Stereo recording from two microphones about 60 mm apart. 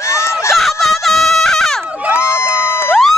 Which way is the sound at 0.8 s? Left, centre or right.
Centre.